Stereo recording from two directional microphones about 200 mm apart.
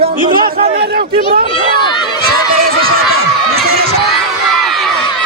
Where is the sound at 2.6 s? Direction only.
50° right (ahead or behind).